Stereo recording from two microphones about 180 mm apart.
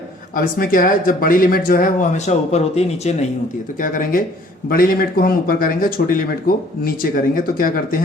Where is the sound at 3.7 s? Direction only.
50° left (ahead or behind).